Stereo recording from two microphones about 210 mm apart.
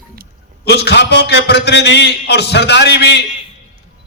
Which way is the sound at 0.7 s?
55° left (ahead or behind).